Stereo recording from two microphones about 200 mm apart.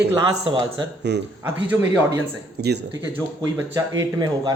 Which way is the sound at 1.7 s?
10° right (ahead or behind).